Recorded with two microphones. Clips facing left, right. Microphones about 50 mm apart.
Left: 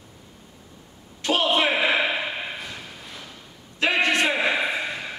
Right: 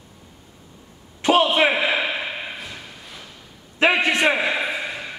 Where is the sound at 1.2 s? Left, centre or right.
Centre.